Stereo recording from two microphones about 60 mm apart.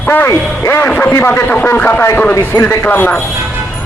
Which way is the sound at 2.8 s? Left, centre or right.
Left.